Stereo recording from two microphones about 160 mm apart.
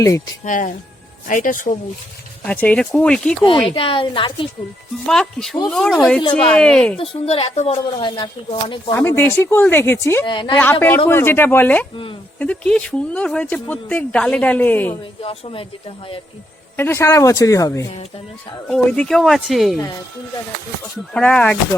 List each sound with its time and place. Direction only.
0.4 s speech: 55° left (ahead or behind)
2.4 s speech: 10° left (ahead or behind)
3.8 s speech: 35° left (ahead or behind)
5.0 s speech: 5° left (ahead or behind)
7.0 s speech: 40° left (ahead or behind)
9.0 s speech: 15° left (ahead or behind)
10.2 s speech: 30° left (ahead or behind)
10.6 s speech: 10° left (ahead or behind)
15.2 s speech: 35° left (ahead or behind)
16.7 s speech: 15° left (ahead or behind)
18.7 s speech: 5° left (ahead or behind)
21.1 s speech: 5° left (ahead or behind)